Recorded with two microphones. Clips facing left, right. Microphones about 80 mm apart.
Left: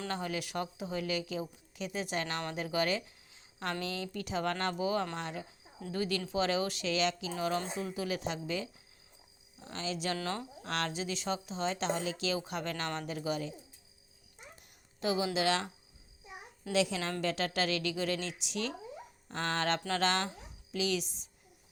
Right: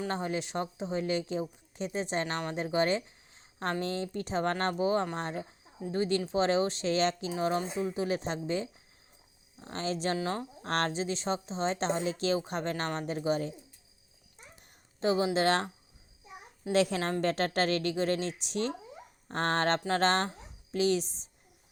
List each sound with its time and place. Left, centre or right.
0.1 s speech: right
7.3 s speech: right
10.2 s speech: right
10.6 s speech: right
15.0 s speech: right
16.7 s speech: right